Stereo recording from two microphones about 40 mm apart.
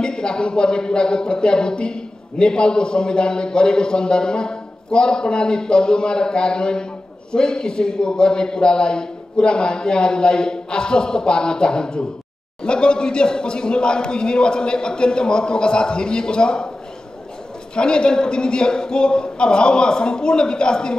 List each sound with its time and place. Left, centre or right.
0.0 s speech: left
17.7 s speech: left